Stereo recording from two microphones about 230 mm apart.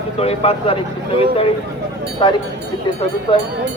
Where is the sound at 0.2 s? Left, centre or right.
Left.